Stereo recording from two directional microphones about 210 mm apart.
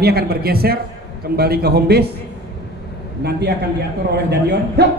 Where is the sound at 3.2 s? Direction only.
50° right (ahead or behind).